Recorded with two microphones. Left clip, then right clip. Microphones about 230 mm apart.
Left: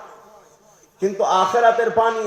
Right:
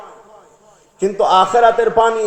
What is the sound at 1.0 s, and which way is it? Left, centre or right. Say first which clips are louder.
A man's voice: right 5 dB; right.